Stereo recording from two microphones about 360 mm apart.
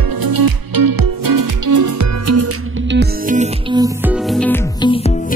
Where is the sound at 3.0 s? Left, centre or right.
Right.